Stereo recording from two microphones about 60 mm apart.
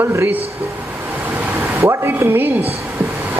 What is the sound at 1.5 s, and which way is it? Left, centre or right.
Speech, right.